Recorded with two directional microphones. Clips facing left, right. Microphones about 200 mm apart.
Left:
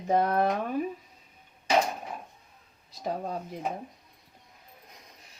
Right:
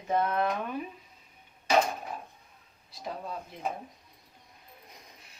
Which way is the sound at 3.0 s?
45° left (ahead or behind).